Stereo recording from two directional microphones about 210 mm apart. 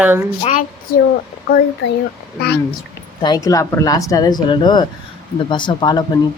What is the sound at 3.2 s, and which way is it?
Speech, 20° left (ahead or behind).